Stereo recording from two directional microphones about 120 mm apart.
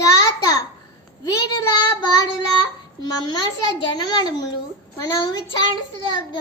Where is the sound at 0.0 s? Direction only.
30° left (ahead or behind).